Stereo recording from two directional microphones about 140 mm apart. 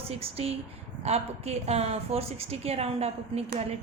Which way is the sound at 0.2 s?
45° right (ahead or behind).